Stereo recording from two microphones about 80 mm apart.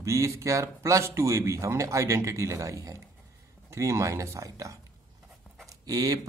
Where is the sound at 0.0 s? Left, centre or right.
Right.